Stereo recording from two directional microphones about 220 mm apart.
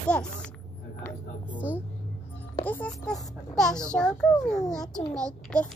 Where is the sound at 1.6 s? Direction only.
5° right (ahead or behind).